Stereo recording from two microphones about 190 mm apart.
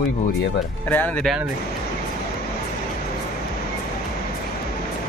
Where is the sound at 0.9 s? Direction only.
10° left (ahead or behind).